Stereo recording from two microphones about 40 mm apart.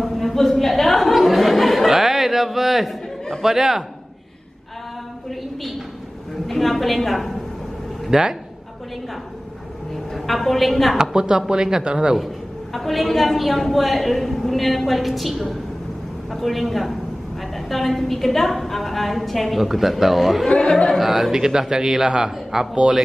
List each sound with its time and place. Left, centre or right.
0.0 s a sound: centre
3.4 s a man's voice: centre
5.3 s a sound: centre
6.4 s a woman's voice: centre
8.1 s a man's voice: centre
9.9 s a woman's voice: centre
11.0 s speech: centre
12.7 s a woman's voice: centre
20.4 s speech: centre
20.9 s a man's voice: centre